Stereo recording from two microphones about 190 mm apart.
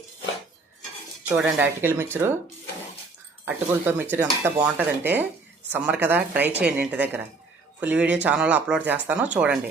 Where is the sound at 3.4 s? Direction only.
10° right (ahead or behind).